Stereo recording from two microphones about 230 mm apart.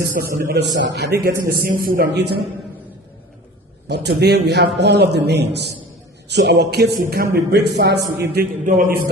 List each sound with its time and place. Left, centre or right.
0.0 s a man's voice: right
3.8 s a man's voice: right